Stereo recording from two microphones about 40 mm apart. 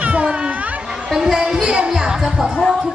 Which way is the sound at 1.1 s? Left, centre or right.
Centre.